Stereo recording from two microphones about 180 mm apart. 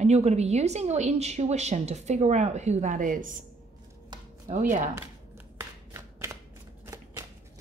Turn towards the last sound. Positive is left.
turn(degrees=-15)  # may be behind; listen again after turning